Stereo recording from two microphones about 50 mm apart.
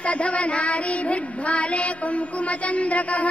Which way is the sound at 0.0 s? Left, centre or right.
Left.